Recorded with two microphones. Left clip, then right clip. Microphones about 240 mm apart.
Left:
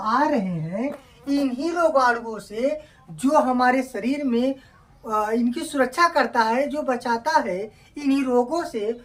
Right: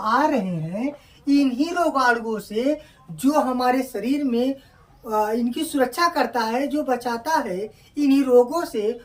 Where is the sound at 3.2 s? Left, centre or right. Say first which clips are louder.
Left 2 dB; centre.